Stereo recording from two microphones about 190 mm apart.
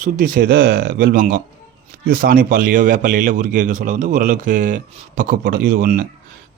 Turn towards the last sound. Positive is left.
turn(degrees=-50)  # may be behind; listen again after turning